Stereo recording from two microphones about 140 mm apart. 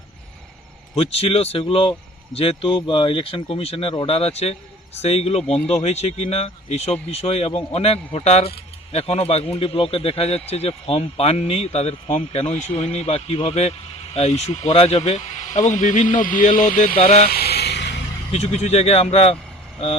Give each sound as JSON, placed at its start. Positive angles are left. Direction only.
{"t": 0.9, "sound": "speech", "side_deg": 45}
{"t": 15.4, "sound": "speech", "side_deg": 60}
{"t": 17.0, "sound": "speech", "side_deg": 60}
{"t": 18.3, "sound": "speech", "side_deg": 50}